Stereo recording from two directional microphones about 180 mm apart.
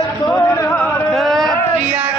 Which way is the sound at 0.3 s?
20° left (ahead or behind).